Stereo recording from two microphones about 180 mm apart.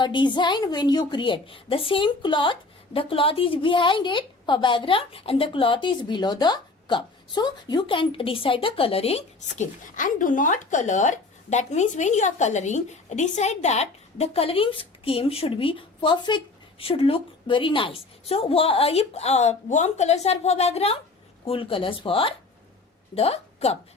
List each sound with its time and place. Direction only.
0.0 s a woman's voice: 25° left (ahead or behind)